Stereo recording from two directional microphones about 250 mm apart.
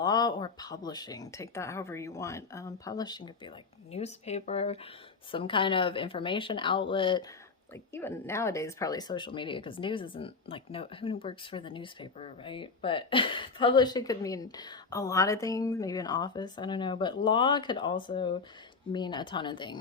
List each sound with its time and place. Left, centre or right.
0.0 s a woman's voice: centre
7.7 s a woman's voice: centre